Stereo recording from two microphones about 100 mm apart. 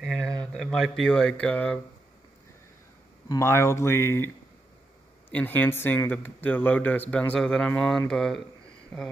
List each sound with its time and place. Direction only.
0.0 s a sound: centre (ahead or behind)
0.4 s speech: 5° left (ahead or behind)
3.3 s speech: 30° left (ahead or behind)
5.3 s speech: 15° left (ahead or behind)